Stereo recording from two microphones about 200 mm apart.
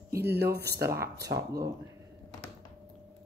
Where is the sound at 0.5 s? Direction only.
55° right (ahead or behind).